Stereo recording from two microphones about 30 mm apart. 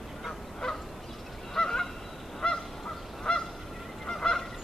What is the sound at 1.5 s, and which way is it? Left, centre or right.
Goose, centre.